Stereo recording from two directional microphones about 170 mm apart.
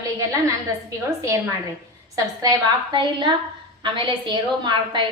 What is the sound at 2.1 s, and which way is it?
A woman's voice, 20° right (ahead or behind).